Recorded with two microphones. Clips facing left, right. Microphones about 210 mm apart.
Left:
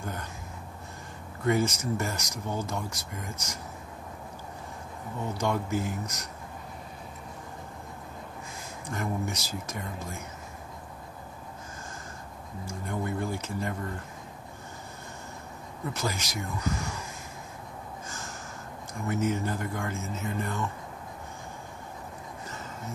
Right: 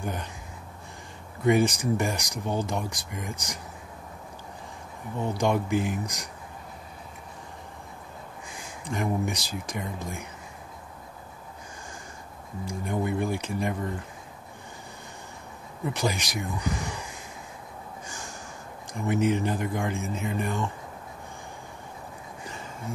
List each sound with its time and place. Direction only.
1.4 s speech: 15° right (ahead or behind)
5.4 s speech: 15° right (ahead or behind)
8.5 s speech: 15° right (ahead or behind)
12.6 s speech: 15° right (ahead or behind)
15.8 s speech: 15° right (ahead or behind)
18.0 s snort: 15° right (ahead or behind)
18.9 s speech: 15° right (ahead or behind)
22.4 s a sound: 15° right (ahead or behind)